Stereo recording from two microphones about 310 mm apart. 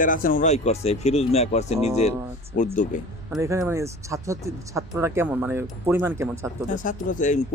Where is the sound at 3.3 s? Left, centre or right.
Centre.